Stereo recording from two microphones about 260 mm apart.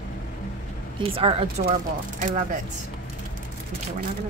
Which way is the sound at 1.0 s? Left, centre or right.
Right.